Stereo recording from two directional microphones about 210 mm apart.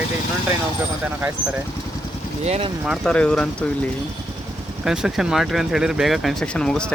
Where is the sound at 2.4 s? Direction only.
30° right (ahead or behind).